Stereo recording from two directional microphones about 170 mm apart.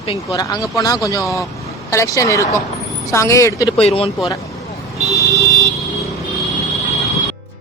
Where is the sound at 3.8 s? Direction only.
35° left (ahead or behind).